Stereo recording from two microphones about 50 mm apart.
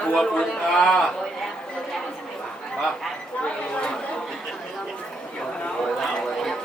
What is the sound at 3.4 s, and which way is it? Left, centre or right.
Speech, left.